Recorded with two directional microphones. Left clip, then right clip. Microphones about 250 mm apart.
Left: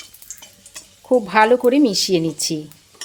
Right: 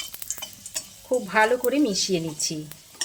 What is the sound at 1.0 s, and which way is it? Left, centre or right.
A woman's voice, left.